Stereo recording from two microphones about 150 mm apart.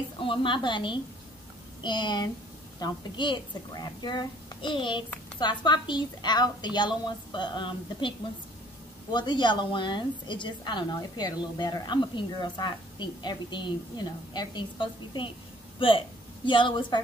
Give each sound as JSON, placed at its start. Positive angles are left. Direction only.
{"t": 0.2, "sound": "a woman's voice", "side_deg": 35}
{"t": 9.1, "sound": "a woman's voice", "side_deg": 30}
{"t": 16.4, "sound": "a woman's voice", "side_deg": 35}